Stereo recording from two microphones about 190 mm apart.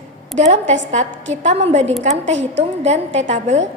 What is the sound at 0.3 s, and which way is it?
A woman's voice, 35° right (ahead or behind).